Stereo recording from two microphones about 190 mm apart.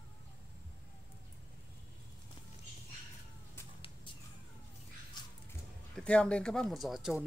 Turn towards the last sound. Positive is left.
turn(degrees=0)  # may be behind; listen again after turning